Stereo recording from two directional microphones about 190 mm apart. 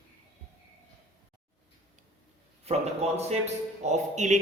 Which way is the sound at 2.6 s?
35° right (ahead or behind).